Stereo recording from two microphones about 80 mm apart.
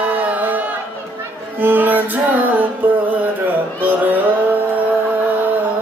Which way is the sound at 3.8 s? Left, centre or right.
Right.